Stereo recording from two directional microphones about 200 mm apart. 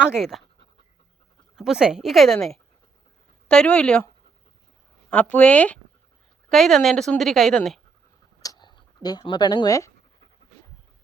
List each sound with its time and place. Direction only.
0.0 s a woman's voice: centre (ahead or behind)
1.5 s a woman's voice: centre (ahead or behind)
5.1 s a woman's voice: 5° left (ahead or behind)
8.4 s a sound: 20° left (ahead or behind)